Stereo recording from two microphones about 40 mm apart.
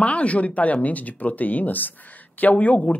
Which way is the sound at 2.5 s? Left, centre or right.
Left.